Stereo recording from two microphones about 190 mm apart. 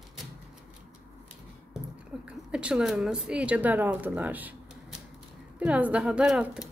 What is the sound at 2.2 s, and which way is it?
A woman's voice, 5° right (ahead or behind).